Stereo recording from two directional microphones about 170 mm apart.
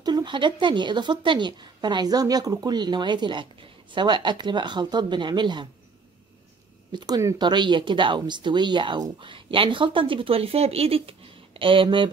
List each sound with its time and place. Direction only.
0.0 s speech: 25° right (ahead or behind)
6.9 s speech: 25° right (ahead or behind)